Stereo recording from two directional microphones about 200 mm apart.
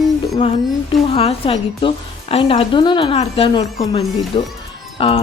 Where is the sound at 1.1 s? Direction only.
30° left (ahead or behind).